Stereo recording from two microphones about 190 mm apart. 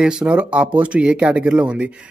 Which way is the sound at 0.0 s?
5° right (ahead or behind).